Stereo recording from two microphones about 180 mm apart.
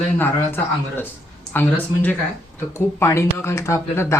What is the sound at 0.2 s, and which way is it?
Speech, 10° left (ahead or behind).